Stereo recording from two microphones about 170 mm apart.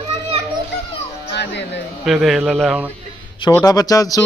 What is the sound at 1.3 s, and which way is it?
Music, 85° left.